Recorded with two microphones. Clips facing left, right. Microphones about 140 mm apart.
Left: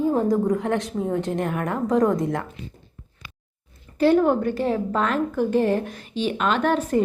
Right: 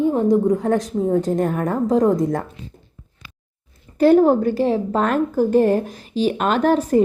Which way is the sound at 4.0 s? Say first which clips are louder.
Right 5 dB; 40° right (ahead or behind).